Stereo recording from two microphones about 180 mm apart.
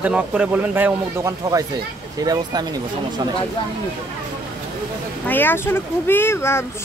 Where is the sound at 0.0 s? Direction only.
5° right (ahead or behind).